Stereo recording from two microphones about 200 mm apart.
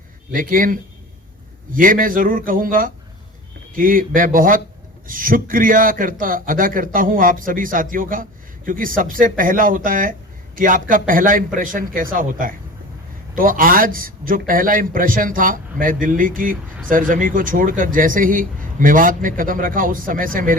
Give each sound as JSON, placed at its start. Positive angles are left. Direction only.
{"t": 0.3, "sound": "a man's voice", "side_deg": -45}